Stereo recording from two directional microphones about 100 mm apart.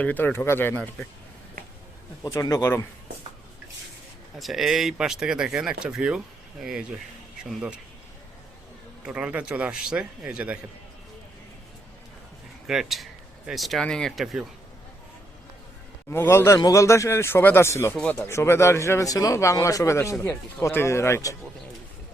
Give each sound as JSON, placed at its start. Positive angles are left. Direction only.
{"t": 0.0, "sound": "speech", "side_deg": 15}
{"t": 2.2, "sound": "speech", "side_deg": 35}
{"t": 4.4, "sound": "speech", "side_deg": 0}
{"t": 9.0, "sound": "speech", "side_deg": -10}
{"t": 12.6, "sound": "speech", "side_deg": -5}
{"t": 16.0, "sound": "speech", "side_deg": 25}
{"t": 17.9, "sound": "speech", "side_deg": 10}
{"t": 18.3, "sound": "speech", "side_deg": 25}